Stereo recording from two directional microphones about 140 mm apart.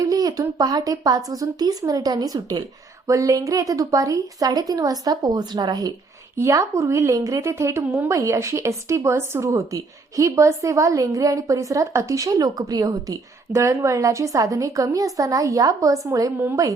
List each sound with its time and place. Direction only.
0.0 s speech: 25° right (ahead or behind)